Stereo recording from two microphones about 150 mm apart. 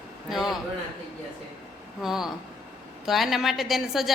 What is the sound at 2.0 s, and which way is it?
A woman's voice, 5° right (ahead or behind).